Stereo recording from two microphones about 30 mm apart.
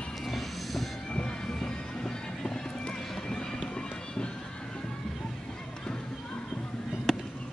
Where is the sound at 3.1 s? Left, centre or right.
Centre.